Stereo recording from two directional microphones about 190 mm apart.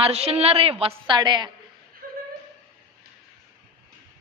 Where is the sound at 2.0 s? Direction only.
50° right (ahead or behind).